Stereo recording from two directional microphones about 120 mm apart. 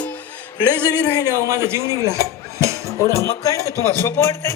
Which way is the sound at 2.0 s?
25° right (ahead or behind).